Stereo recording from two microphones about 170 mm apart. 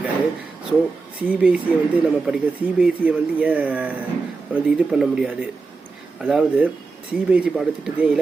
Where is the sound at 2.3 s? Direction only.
5° right (ahead or behind).